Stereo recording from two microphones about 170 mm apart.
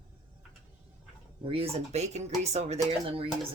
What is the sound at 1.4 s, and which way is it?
Speech, 35° right (ahead or behind).